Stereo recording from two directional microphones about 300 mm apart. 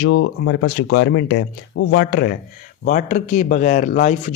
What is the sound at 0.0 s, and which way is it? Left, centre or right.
Speech, left.